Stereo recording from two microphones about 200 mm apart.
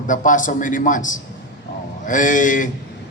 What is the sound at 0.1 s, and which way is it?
A man's voice, 40° left (ahead or behind).